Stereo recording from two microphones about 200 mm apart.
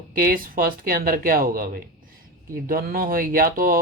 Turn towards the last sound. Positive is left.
turn(degrees=-45)  # may be behind; listen again after turning